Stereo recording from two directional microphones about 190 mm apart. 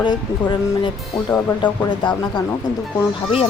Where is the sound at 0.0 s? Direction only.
25° left (ahead or behind).